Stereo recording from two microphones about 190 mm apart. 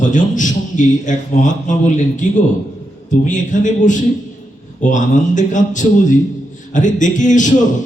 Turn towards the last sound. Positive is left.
turn(degrees=40)  # may be behind; listen again after turning